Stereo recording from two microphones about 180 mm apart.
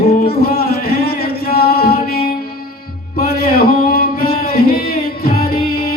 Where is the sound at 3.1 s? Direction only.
55° left (ahead or behind).